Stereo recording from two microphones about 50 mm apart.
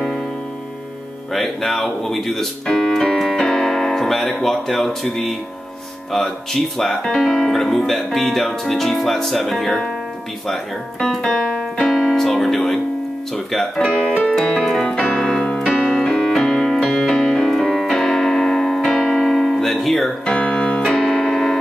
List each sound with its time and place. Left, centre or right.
1.3 s speech: centre
6.1 s speech: centre
11.3 s keyboard: centre
11.9 s piano: centre
12.3 s speech: centre
14.4 s piano: centre
15.7 s keyboard: centre
16.0 s piano: centre
16.9 s music: centre
17.2 s piano: centre
20.2 s piano: centre
20.9 s keyboard: centre